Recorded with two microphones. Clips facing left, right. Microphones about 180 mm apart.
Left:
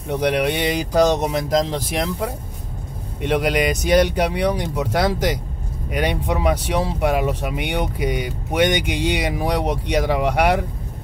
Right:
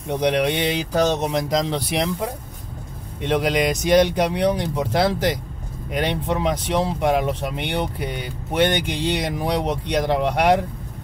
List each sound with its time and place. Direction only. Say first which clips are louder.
0.1 s speech: even; 5° left (ahead or behind)